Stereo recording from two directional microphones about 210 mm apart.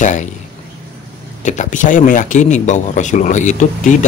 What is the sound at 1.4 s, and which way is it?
A man's voice, 35° left (ahead or behind).